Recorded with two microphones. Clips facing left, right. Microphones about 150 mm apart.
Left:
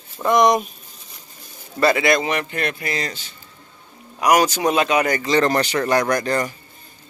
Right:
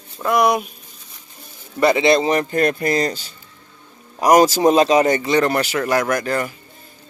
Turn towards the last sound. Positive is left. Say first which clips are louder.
# even
turn(degrees=-5)  # may be behind; listen again after turning